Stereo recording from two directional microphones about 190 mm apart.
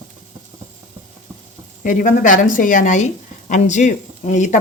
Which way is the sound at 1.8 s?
45° left (ahead or behind).